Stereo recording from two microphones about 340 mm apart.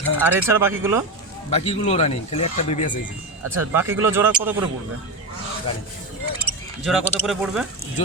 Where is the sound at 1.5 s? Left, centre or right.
Centre.